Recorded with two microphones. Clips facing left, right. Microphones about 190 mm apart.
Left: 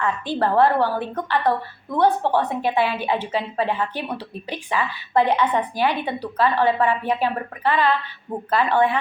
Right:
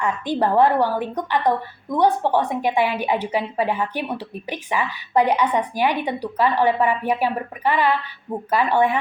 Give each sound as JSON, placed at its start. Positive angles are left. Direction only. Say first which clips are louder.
{"t": 0.0, "sound": "a woman's voice", "louder": "right 1 dB", "side_deg": -15}